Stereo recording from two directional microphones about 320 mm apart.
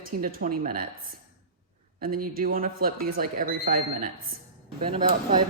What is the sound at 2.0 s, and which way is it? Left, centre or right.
A woman's voice, right.